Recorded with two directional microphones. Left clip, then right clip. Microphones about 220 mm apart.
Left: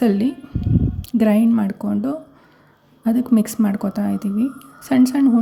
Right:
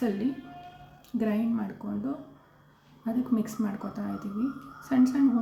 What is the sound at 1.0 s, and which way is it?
Speech, 45° left (ahead or behind).